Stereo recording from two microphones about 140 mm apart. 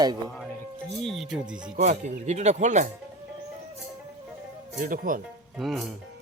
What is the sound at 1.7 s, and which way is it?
Speech, 55° right (ahead or behind).